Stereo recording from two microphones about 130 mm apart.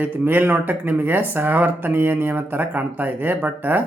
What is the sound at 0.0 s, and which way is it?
Speech, 15° right (ahead or behind).